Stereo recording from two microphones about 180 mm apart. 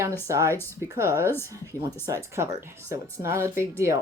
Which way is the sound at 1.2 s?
10° left (ahead or behind).